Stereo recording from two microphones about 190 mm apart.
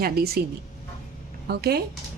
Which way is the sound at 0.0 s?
55° right (ahead or behind).